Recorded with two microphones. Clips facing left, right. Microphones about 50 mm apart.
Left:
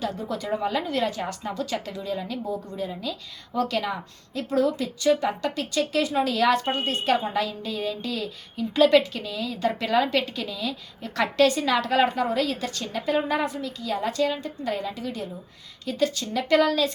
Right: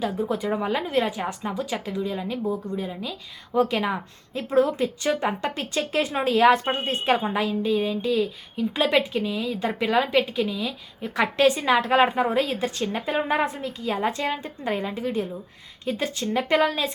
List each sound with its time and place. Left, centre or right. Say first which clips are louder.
0.0 s a woman's voice: right 4 dB; centre
2.4 s a woman's voice: right 3 dB; centre
2.7 s a woman's voice: even; centre